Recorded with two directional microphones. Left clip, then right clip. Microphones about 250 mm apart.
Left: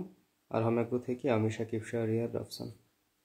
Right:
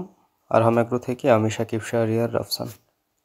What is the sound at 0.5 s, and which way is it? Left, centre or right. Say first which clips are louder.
Speech: right 13 dB; right.